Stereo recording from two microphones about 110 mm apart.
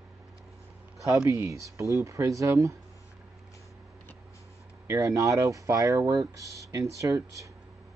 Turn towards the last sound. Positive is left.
turn(degrees=-30)  # may be behind; listen again after turning